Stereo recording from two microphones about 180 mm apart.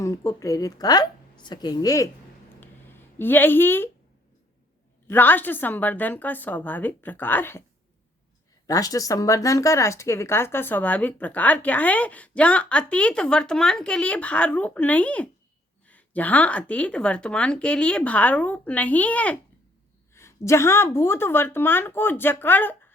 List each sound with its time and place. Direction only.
0.0 s a woman's voice: 20° left (ahead or behind)
2.6 s a sound: 10° left (ahead or behind)
5.0 s speech: 10° left (ahead or behind)
8.6 s speech: 20° left (ahead or behind)